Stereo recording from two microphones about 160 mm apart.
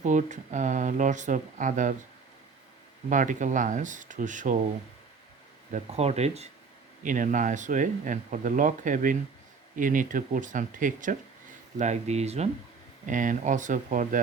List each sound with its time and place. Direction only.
0.0 s speech: 50° right (ahead or behind)
3.1 s speech: 55° right (ahead or behind)
5.7 s speech: 40° right (ahead or behind)
7.0 s speech: 55° right (ahead or behind)
13.1 s speech: 55° right (ahead or behind)